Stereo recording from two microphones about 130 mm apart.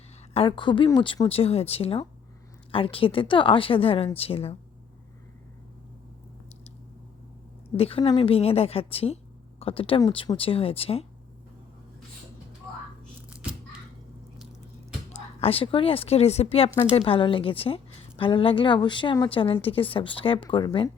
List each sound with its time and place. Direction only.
0.3 s a woman's voice: 40° left (ahead or behind)
7.8 s a woman's voice: 45° left (ahead or behind)
15.1 s a woman's voice: 50° left (ahead or behind)